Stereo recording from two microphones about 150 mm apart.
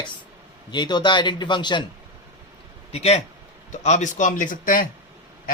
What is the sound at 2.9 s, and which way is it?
A man's voice, 45° left (ahead or behind).